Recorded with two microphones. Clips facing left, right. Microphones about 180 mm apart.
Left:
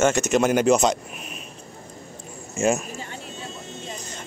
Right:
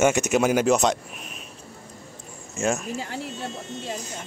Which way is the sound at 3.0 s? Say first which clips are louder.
Right 4 dB; 75° right (ahead or behind).